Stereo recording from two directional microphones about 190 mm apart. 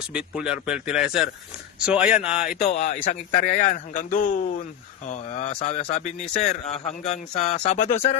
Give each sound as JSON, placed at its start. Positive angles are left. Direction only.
{"t": 0.1, "sound": "speech", "side_deg": -5}
{"t": 2.4, "sound": "a man's voice", "side_deg": 45}